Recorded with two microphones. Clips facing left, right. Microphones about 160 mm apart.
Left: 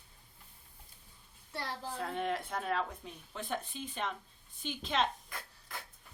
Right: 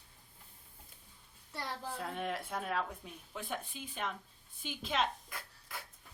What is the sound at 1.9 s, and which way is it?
Speech, 5° right (ahead or behind).